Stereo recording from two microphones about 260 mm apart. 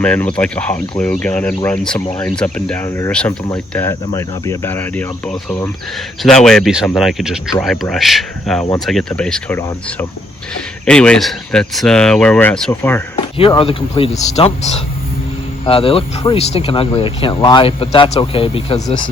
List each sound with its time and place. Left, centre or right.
0.0 s speech: centre
13.3 s speech: left